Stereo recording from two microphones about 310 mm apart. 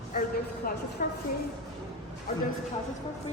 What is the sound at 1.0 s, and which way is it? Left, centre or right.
Speech, left.